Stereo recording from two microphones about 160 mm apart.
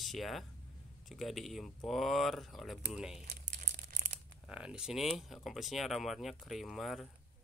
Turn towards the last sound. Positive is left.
turn(degrees=0)  # may be behind; listen again after turning